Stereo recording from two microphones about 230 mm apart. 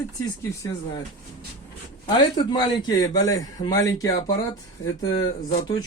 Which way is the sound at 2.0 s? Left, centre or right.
Centre.